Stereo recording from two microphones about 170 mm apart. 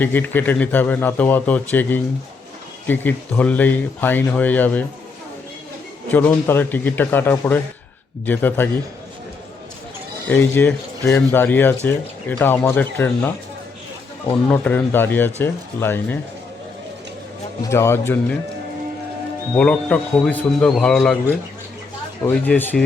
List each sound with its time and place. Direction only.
0.0 s speech: 10° left (ahead or behind)
6.1 s speech: 10° left (ahead or behind)
10.2 s speech: 10° left (ahead or behind)
14.5 s speech: 10° left (ahead or behind)
17.7 s speech: 15° left (ahead or behind)
19.5 s a man's voice: 5° left (ahead or behind)
22.2 s speech: 10° left (ahead or behind)